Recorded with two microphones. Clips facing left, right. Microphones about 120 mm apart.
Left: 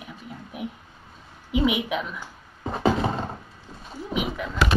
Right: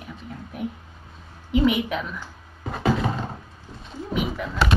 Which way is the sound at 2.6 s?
30° left (ahead or behind).